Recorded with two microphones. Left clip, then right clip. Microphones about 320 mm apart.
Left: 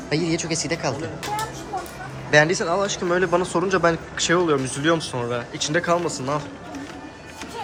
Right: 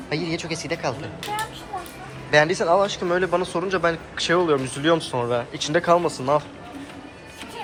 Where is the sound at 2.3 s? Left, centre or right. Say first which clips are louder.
Even; centre.